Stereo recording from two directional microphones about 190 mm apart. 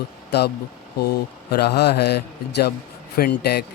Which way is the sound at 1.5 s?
60° left (ahead or behind).